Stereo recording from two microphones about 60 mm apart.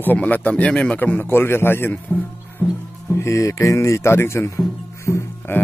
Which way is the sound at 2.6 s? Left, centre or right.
Left.